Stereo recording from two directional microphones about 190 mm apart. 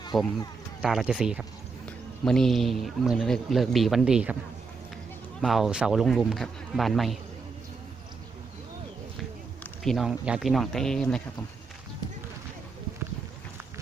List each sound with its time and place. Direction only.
0.1 s speech: 20° left (ahead or behind)
0.8 s a man's voice: 5° right (ahead or behind)
5.4 s a man's voice: centre (ahead or behind)
9.8 s a man's voice: centre (ahead or behind)